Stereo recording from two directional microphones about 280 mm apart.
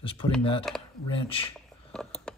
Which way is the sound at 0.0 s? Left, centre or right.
Centre.